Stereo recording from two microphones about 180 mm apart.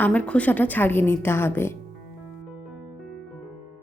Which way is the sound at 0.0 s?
10° left (ahead or behind).